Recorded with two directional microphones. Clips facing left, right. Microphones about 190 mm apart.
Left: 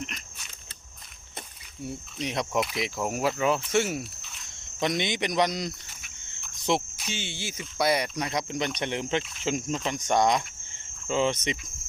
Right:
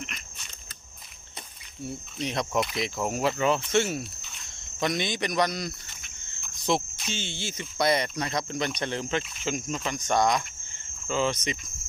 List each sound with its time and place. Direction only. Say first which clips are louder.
2.2 s speech: even; 10° left (ahead or behind)
4.8 s speech: left 1 dB; 20° left (ahead or behind)
6.9 s speech: right 1 dB; 10° left (ahead or behind)